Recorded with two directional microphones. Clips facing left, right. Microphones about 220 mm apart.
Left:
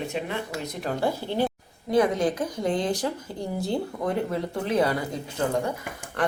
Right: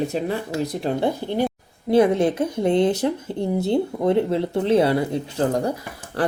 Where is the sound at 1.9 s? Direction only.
25° right (ahead or behind).